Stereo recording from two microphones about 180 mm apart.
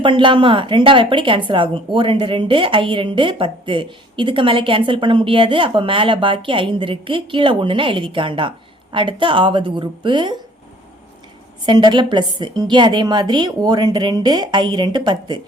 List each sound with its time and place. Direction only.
0.0 s a woman's voice: 25° right (ahead or behind)
11.6 s a woman's voice: 25° right (ahead or behind)